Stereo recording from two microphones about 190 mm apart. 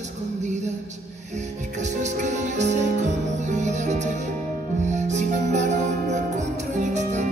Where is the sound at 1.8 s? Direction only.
40° right (ahead or behind).